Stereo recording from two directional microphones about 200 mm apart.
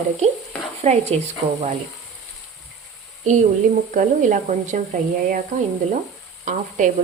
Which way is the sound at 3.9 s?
35° right (ahead or behind).